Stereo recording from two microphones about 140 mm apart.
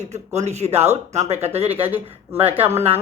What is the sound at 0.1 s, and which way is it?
A woman's voice, 50° right (ahead or behind).